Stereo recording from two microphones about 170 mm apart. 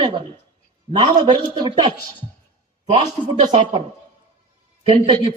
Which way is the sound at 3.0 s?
35° right (ahead or behind).